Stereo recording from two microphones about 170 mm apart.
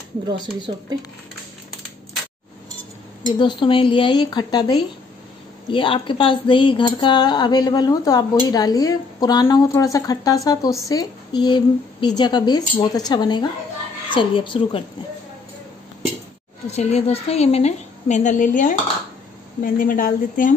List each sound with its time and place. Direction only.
0.6 s speech: 25° right (ahead or behind)
3.3 s speech: 25° left (ahead or behind)
16.7 s a woman's voice: 40° left (ahead or behind)